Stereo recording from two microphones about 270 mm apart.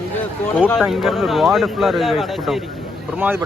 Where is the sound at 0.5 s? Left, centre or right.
Centre.